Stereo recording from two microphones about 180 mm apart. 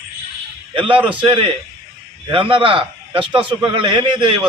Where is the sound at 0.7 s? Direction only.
30° right (ahead or behind).